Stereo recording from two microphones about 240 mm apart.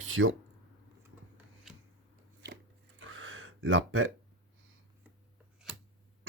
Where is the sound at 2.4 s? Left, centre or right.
Right.